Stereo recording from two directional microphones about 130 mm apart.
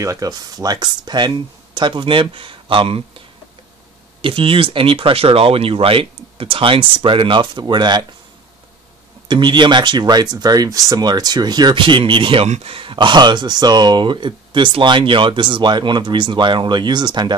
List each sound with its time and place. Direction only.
0.0 s speech: 25° right (ahead or behind); by 3.0 s 40° right (ahead or behind)
4.2 s speech: 45° right (ahead or behind)
9.3 s speech: 35° right (ahead or behind)
12.4 s speech: 50° right (ahead or behind); by 17.4 s 35° right (ahead or behind)